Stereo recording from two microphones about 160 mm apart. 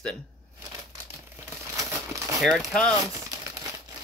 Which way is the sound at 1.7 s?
20° right (ahead or behind).